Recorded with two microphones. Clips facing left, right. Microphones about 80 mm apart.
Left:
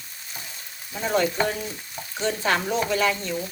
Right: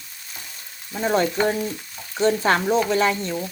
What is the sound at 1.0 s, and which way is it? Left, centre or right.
Speech, right.